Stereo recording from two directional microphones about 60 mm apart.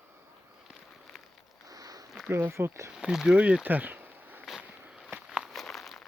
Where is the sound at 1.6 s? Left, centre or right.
Right.